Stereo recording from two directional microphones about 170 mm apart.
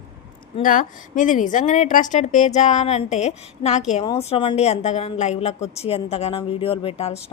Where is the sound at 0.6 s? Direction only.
50° left (ahead or behind).